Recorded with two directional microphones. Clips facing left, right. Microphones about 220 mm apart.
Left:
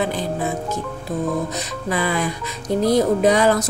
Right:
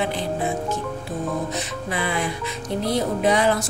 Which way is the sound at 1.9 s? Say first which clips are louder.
Left 4 dB; 40° left (ahead or behind).